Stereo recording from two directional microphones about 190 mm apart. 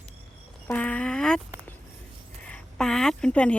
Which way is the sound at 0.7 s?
5° left (ahead or behind).